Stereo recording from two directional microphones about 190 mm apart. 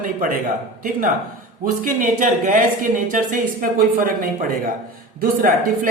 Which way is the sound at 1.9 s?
45° right (ahead or behind).